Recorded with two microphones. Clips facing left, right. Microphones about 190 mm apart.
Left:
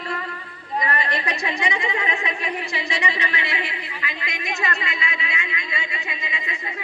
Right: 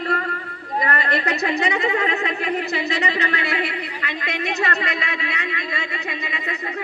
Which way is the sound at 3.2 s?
40° right (ahead or behind).